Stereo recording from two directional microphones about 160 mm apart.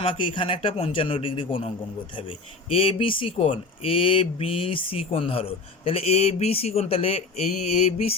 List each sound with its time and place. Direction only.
0.0 s speech: 30° left (ahead or behind)